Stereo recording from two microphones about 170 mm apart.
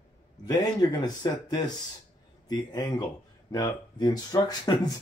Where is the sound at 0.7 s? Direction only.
25° left (ahead or behind).